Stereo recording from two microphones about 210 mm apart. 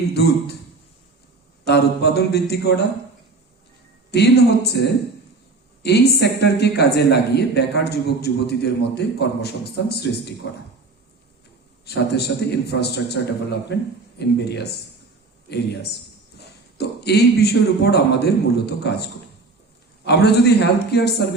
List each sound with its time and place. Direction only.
0.1 s speech: 50° left (ahead or behind)
1.6 s speech: 50° left (ahead or behind)
4.1 s speech: 50° left (ahead or behind)
11.9 s speech: 50° left (ahead or behind)
12.7 s speech: 65° left (ahead or behind)
16.7 s speech: 50° left (ahead or behind)
20.1 s speech: 50° left (ahead or behind)